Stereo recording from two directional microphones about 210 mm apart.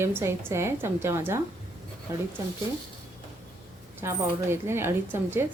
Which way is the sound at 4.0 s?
10° right (ahead or behind).